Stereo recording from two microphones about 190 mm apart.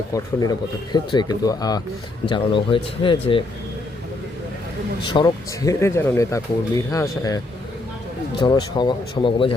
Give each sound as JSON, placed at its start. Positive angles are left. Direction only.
{"t": 0.9, "sound": "speech", "side_deg": 20}
{"t": 5.0, "sound": "speech", "side_deg": 20}